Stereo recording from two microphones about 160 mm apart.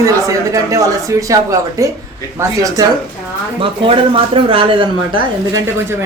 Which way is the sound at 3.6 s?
35° right (ahead or behind).